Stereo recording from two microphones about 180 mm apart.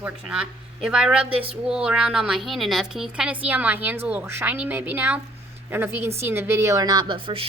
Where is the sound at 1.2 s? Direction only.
30° right (ahead or behind).